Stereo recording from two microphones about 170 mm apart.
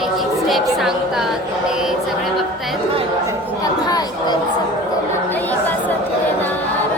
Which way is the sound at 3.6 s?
25° left (ahead or behind).